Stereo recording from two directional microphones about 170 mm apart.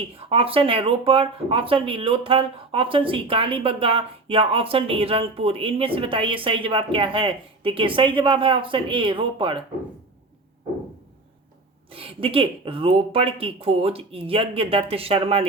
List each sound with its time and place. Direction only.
0.0 s speech: 35° right (ahead or behind)
11.9 s speech: 35° right (ahead or behind)